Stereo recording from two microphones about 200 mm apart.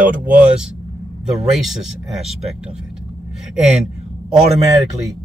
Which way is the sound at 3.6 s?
Centre (ahead or behind).